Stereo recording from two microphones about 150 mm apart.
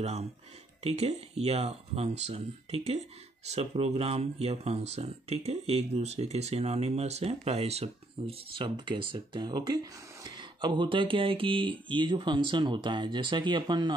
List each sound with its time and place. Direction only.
0.0 s speech: 45° right (ahead or behind); by 13.9 s 30° right (ahead or behind)